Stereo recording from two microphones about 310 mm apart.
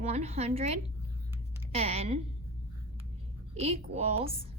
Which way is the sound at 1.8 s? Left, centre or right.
Centre.